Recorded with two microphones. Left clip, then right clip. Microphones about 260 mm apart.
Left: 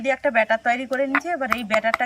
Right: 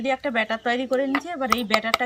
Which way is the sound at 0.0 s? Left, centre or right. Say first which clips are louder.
Left 4 dB; centre.